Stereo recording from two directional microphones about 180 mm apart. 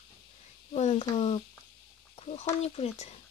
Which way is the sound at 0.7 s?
40° left (ahead or behind).